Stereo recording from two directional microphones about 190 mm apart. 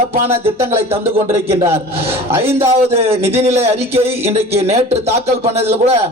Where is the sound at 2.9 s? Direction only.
30° right (ahead or behind).